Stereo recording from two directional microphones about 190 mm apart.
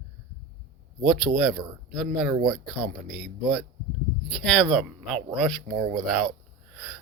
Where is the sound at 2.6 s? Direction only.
25° right (ahead or behind).